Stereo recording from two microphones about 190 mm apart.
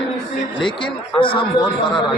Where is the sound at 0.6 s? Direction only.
25° left (ahead or behind).